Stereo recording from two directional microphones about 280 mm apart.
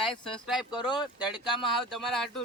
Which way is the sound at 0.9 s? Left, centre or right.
Centre.